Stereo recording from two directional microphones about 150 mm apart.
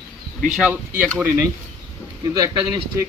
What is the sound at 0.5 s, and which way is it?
Speech, 10° right (ahead or behind).